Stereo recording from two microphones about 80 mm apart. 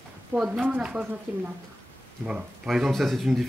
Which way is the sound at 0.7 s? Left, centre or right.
Right.